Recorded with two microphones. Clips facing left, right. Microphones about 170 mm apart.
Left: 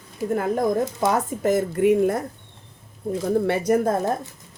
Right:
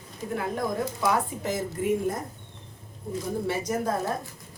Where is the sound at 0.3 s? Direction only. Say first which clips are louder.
Left 7 dB; 50° left (ahead or behind).